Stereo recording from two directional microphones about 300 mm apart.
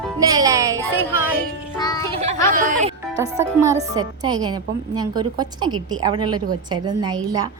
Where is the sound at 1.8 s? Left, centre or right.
Centre.